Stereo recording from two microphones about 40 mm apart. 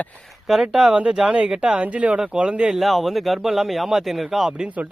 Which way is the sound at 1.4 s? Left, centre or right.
Right.